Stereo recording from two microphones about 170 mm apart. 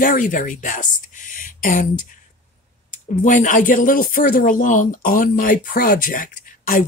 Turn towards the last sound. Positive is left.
turn(degrees=55)  # may be behind; listen again after turning